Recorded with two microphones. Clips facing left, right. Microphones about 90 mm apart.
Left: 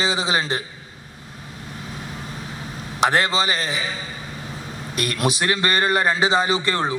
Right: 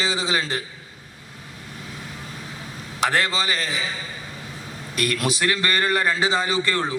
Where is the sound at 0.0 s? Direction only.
20° left (ahead or behind).